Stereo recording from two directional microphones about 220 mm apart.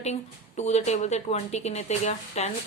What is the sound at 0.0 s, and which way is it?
Speech, 30° left (ahead or behind).